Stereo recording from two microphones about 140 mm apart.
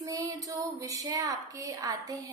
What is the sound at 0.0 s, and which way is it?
A woman's voice, 25° right (ahead or behind).